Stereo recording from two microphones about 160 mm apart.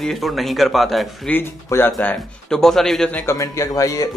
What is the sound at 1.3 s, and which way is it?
Speech, 15° left (ahead or behind).